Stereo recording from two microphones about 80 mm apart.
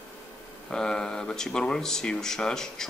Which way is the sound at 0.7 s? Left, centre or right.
Centre.